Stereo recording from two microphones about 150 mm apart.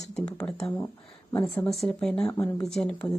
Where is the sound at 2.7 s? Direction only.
5° left (ahead or behind).